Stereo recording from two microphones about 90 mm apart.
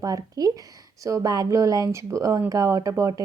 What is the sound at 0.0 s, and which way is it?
Speech, 45° right (ahead or behind).